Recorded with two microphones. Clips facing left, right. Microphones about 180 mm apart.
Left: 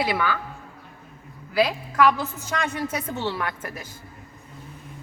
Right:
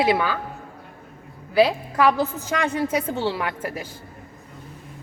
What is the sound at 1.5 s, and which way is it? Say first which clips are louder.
A woman's voice: right 3 dB; 30° right (ahead or behind).